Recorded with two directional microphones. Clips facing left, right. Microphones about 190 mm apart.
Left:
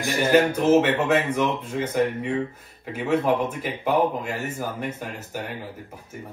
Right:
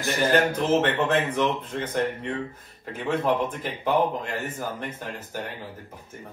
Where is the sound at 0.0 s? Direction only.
10° left (ahead or behind).